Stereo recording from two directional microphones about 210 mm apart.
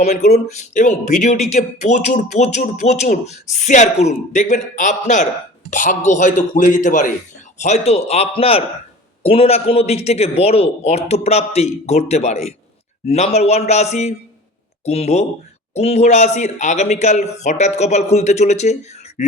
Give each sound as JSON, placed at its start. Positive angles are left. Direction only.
{"t": 0.3, "sound": "speech", "side_deg": 35}